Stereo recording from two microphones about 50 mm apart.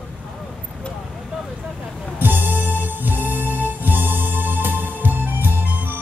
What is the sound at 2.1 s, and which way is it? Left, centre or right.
Music, right.